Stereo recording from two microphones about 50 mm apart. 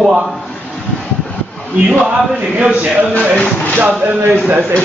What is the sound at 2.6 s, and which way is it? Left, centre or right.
Speech, right.